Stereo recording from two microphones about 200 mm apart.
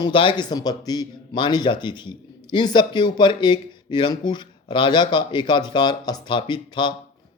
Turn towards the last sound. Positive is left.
turn(degrees=25)  # may be behind; listen again after turning